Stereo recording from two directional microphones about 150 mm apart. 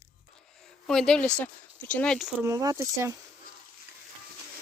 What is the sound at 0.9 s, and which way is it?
Speech, 5° left (ahead or behind).